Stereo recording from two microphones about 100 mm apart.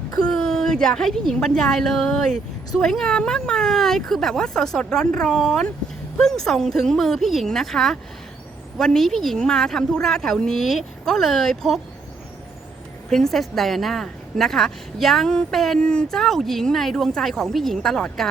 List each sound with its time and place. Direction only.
0.2 s a sound: 5° left (ahead or behind)
1.3 s a woman's voice: 5° left (ahead or behind)
13.1 s a woman's voice: 5° left (ahead or behind)